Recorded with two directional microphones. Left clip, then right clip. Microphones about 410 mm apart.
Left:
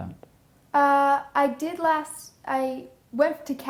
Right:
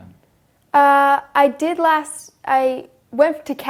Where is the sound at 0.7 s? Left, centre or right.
Right.